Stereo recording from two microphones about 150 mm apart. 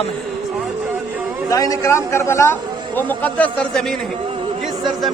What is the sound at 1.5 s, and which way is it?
A man's voice, 25° left (ahead or behind).